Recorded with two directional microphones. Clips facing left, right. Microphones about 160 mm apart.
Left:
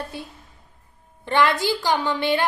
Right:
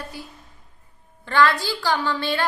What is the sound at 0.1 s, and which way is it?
A woman's voice, 25° left (ahead or behind).